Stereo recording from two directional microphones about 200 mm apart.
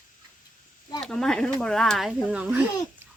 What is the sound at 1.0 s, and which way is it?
Speech, centre (ahead or behind).